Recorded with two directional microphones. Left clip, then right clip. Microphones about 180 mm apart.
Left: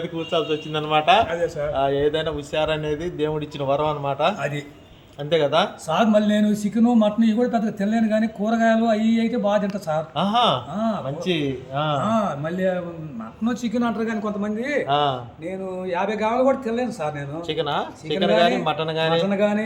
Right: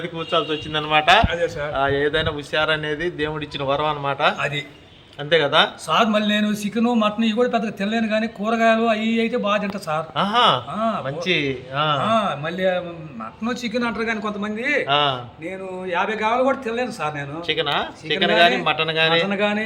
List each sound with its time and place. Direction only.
0.2 s speech: 5° right (ahead or behind)
1.3 s a man's voice: 15° left (ahead or behind)
1.7 s speech: centre (ahead or behind)
4.4 s a man's voice: 15° left (ahead or behind)
5.3 s speech: centre (ahead or behind)
5.9 s a man's voice: 15° left (ahead or behind)
10.2 s speech: 5° right (ahead or behind)
10.8 s a man's voice: 15° left (ahead or behind)
11.2 s speech: centre (ahead or behind)
12.0 s a man's voice: 15° left (ahead or behind)
14.8 s a man's voice: 5° right (ahead or behind)
15.4 s a man's voice: 10° left (ahead or behind)
17.4 s speech: 5° right (ahead or behind)
19.3 s a man's voice: 10° left (ahead or behind)